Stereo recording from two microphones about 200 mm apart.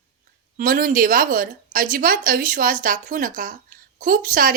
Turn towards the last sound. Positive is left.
turn(degrees=-45)  # may be behind; listen again after turning